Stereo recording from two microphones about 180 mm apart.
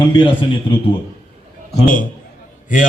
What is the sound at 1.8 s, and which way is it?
Speech, 50° left (ahead or behind).